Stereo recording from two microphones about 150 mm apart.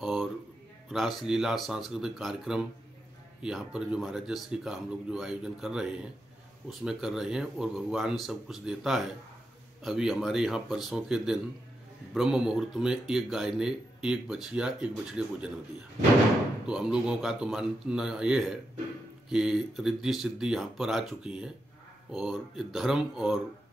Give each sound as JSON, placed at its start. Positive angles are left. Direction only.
{"t": 0.0, "sound": "a sound", "side_deg": -5}
{"t": 0.8, "sound": "speech", "side_deg": 0}
{"t": 16.6, "sound": "speech", "side_deg": -5}